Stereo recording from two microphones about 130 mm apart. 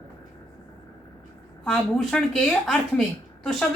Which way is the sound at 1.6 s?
Centre (ahead or behind).